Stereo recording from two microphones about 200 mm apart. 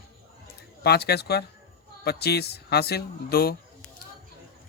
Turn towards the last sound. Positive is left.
turn(degrees=50)  # may be behind; listen again after turning